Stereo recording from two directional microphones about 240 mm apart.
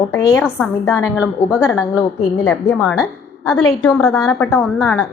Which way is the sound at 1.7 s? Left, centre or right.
Centre.